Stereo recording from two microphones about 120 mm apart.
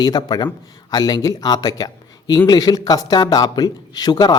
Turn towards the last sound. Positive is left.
turn(degrees=35)  # may be behind; listen again after turning